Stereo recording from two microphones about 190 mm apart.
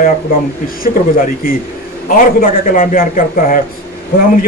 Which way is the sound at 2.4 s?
45° left (ahead or behind).